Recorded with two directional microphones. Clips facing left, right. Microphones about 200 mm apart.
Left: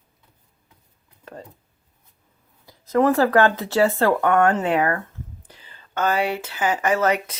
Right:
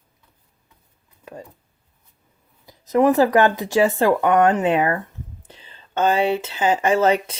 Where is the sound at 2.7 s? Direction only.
15° right (ahead or behind).